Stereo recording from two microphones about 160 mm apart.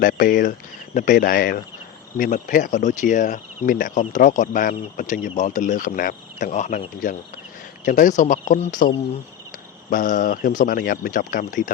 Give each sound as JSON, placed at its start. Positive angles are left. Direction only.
{"t": 0.0, "sound": "speech", "side_deg": 60}